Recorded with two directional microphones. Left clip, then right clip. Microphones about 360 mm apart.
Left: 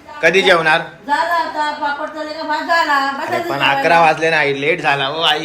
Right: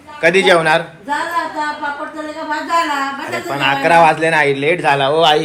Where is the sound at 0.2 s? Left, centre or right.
Centre.